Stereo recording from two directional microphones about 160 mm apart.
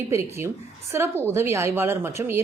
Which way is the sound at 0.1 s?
15° right (ahead or behind).